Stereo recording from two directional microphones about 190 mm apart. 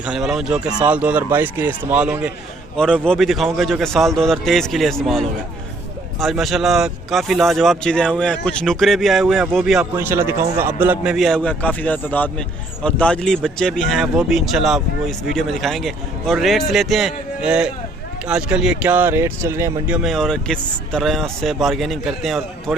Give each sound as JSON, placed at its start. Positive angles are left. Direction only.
{"t": 0.0, "sound": "speech", "side_deg": -5}
{"t": 9.9, "sound": "speech", "side_deg": -10}
{"t": 20.0, "sound": "speech", "side_deg": 0}